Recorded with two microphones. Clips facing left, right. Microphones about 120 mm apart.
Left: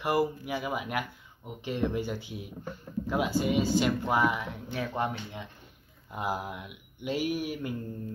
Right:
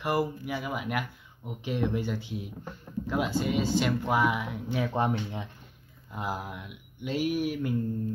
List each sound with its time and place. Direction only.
0.0 s speech: centre (ahead or behind)
4.9 s speech: 30° right (ahead or behind)
6.1 s speech: 5° left (ahead or behind)